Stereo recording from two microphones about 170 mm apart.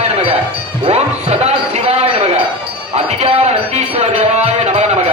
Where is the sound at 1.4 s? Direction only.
40° right (ahead or behind).